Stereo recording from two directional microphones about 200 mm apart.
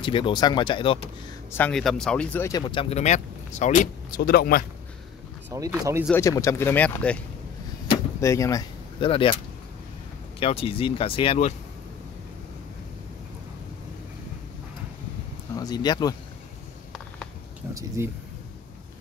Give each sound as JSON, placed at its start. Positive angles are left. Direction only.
{"t": 0.0, "sound": "speech", "side_deg": 25}
{"t": 1.5, "sound": "speech", "side_deg": 5}
{"t": 5.5, "sound": "speech", "side_deg": -15}
{"t": 6.1, "sound": "speech", "side_deg": 15}
{"t": 8.2, "sound": "speech", "side_deg": 15}
{"t": 10.4, "sound": "speech", "side_deg": 30}
{"t": 15.5, "sound": "speech", "side_deg": 20}
{"t": 17.7, "sound": "speech", "side_deg": -15}